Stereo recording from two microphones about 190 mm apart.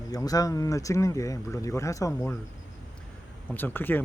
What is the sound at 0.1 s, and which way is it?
Speech, 20° left (ahead or behind).